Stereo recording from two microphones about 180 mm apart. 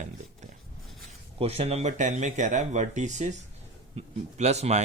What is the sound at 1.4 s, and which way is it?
Speech, 35° right (ahead or behind).